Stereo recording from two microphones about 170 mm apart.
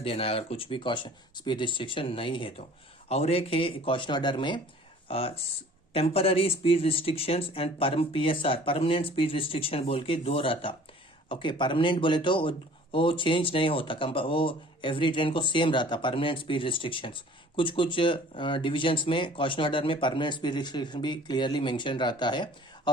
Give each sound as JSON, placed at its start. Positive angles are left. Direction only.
{"t": 0.0, "sound": "speech", "side_deg": 35}